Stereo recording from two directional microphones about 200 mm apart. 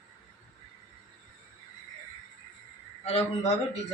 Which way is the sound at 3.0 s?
35° left (ahead or behind).